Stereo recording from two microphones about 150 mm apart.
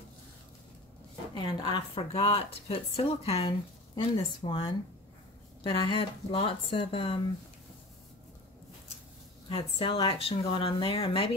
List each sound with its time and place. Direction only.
1.3 s a woman's voice: 30° left (ahead or behind)
9.5 s a woman's voice: 35° left (ahead or behind)